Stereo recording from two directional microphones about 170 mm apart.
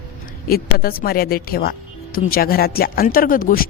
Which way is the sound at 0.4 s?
60° left (ahead or behind).